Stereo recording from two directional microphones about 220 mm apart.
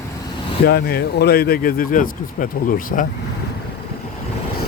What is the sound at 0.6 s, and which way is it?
Speech, 45° left (ahead or behind).